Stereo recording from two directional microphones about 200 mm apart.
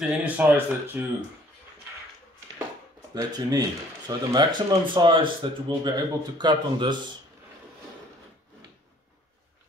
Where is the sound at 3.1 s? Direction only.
20° right (ahead or behind).